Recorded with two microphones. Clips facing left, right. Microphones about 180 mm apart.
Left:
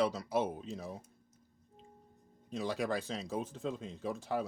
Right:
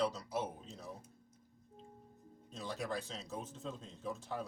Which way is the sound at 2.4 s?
85° left.